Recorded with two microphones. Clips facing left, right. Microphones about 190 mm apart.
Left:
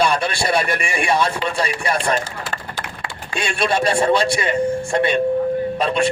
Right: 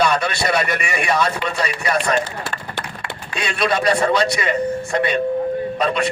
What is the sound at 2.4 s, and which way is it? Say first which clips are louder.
Run: even; 65° right (ahead or behind).